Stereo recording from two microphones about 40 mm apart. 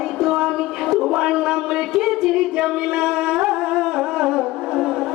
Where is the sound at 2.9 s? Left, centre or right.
Centre.